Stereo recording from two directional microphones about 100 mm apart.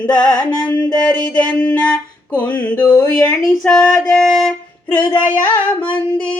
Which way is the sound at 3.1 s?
5° left (ahead or behind).